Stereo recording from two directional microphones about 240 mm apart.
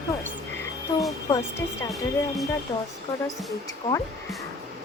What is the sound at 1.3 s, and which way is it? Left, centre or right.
Speech, centre.